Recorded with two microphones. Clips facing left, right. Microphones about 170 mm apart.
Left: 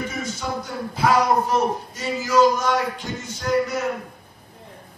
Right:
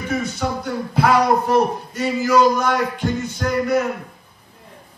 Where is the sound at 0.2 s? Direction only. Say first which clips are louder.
Right 4 dB; 65° right (ahead or behind).